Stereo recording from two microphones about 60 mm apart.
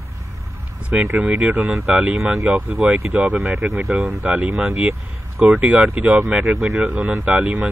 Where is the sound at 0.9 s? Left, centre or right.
Centre.